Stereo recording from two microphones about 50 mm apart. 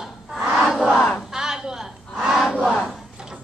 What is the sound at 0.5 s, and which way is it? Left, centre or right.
Battle cry, centre.